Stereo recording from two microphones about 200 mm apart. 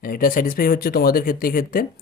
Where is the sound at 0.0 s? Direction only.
45° left (ahead or behind).